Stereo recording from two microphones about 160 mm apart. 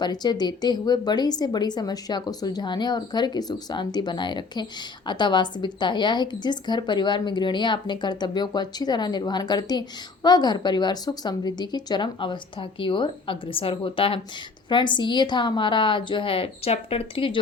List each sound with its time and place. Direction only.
0.0 s a woman's voice: 25° left (ahead or behind)